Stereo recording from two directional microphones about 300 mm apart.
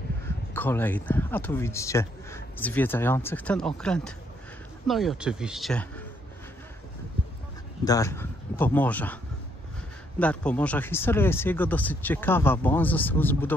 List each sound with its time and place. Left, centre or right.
0.5 s a man's voice: centre
7.8 s a man's voice: centre